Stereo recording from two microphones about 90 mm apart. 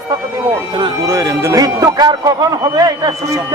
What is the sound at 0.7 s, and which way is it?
Speech, 55° right (ahead or behind).